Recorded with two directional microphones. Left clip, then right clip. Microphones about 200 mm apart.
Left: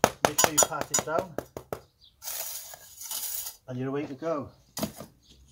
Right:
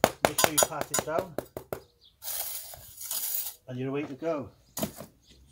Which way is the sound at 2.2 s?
5° left (ahead or behind).